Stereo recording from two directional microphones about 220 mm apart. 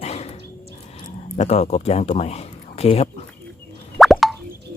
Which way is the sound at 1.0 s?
30° left (ahead or behind).